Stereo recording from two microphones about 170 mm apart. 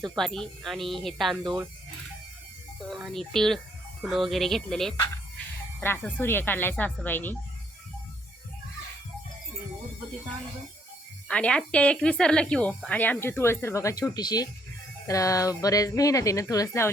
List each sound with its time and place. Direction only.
0.0 s speech: centre (ahead or behind)
2.9 s speech: centre (ahead or behind)
11.3 s a woman's voice: 5° left (ahead or behind)